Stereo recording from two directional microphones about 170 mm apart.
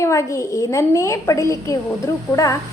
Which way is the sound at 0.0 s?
15° left (ahead or behind).